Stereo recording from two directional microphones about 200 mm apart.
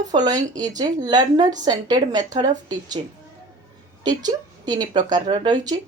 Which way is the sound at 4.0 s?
20° right (ahead or behind).